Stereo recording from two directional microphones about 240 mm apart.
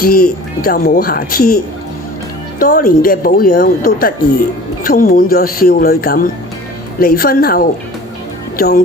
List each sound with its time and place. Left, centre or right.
0.0 s speech: left